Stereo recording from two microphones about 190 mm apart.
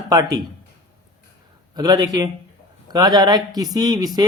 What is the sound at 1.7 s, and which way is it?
Speech, 20° right (ahead or behind).